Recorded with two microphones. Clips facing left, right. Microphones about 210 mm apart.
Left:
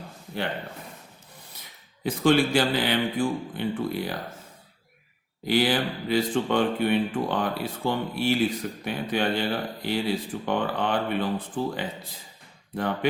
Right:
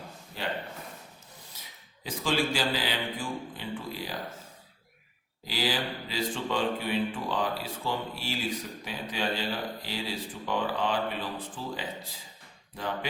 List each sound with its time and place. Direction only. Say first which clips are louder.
2.0 s speech: left 8 dB; 60° left (ahead or behind)
5.5 s speech: left 8 dB; 60° left (ahead or behind)